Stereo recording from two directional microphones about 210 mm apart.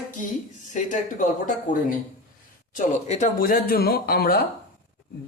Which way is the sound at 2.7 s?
35° left (ahead or behind).